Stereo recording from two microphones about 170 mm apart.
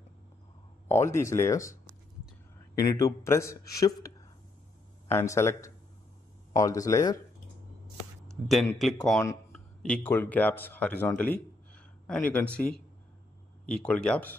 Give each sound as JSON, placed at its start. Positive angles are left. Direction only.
{"t": 0.8, "sound": "speech", "side_deg": 15}
{"t": 2.8, "sound": "speech", "side_deg": 20}
{"t": 8.7, "sound": "speech", "side_deg": 0}